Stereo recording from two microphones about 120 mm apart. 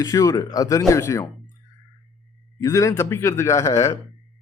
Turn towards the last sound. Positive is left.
turn(degrees=25)  # may be behind; listen again after turning